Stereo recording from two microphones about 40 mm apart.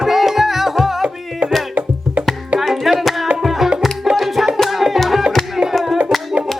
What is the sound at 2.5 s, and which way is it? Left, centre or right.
Music, centre.